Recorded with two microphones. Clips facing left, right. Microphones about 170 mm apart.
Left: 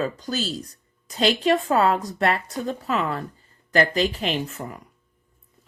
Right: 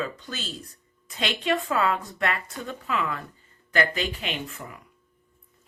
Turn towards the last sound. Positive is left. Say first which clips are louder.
# left 6 dB
turn(degrees=40)  # may be behind; listen again after turning